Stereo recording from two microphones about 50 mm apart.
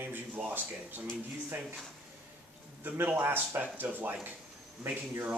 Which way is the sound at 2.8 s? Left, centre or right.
Right.